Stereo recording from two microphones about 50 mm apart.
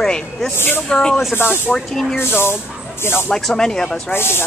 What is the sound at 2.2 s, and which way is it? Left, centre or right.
Speech, left.